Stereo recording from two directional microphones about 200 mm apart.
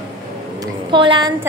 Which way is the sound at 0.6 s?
25° right (ahead or behind).